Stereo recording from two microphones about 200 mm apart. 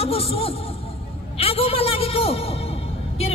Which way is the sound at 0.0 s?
30° left (ahead or behind).